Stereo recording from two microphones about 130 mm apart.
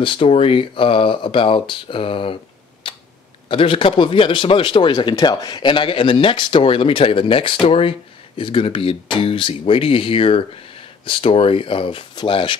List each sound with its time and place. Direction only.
0.0 s speech: 40° left (ahead or behind)
2.8 s tick-tock: 45° left (ahead or behind)
3.4 s speech: 45° left (ahead or behind)